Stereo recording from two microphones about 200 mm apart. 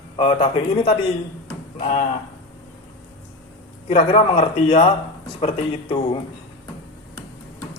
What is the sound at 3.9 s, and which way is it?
Speech, 30° left (ahead or behind).